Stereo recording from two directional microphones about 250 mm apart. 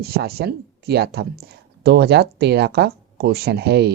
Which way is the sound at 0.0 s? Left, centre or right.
Right.